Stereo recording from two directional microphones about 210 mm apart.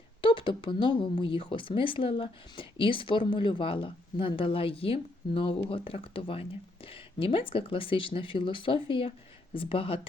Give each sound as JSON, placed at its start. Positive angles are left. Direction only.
{"t": 0.2, "sound": "speech", "side_deg": 25}